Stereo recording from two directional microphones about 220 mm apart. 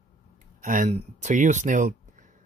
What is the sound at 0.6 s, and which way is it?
Speech, 35° right (ahead or behind).